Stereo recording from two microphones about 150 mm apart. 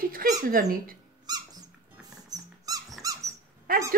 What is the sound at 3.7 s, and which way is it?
Speech, 75° right (ahead or behind).